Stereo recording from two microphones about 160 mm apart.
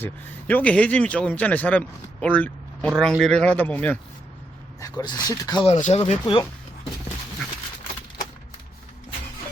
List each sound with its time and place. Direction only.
0.0 s speech: 10° left (ahead or behind)
4.8 s speech: 25° left (ahead or behind)
5.6 s speech: 45° left (ahead or behind)